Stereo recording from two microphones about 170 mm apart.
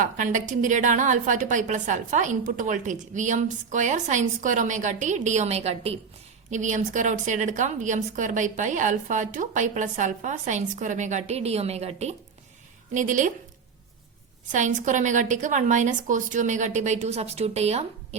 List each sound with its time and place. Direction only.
0.0 s a woman's voice: 45° right (ahead or behind)
14.5 s a woman's voice: 45° right (ahead or behind)